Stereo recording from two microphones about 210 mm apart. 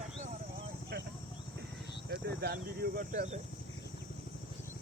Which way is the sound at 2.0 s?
50° right (ahead or behind).